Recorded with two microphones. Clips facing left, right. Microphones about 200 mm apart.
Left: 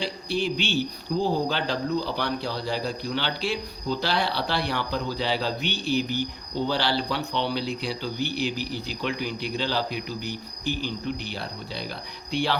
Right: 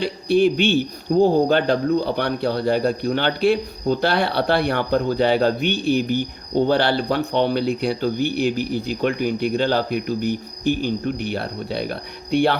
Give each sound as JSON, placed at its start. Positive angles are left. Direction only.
{"t": 0.0, "sound": "speech", "side_deg": -55}